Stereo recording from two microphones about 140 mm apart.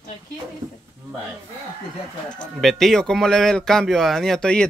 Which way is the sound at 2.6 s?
Centre (ahead or behind).